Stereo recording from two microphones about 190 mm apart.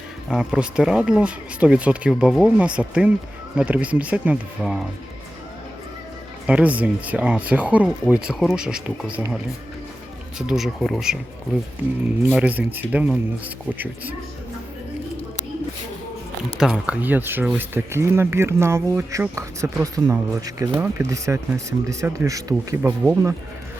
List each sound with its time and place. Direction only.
0.3 s speech: 5° right (ahead or behind)
6.5 s speech: 5° right (ahead or behind)
12.3 s speech: 5° right (ahead or behind)
16.6 s speech: 5° right (ahead or behind)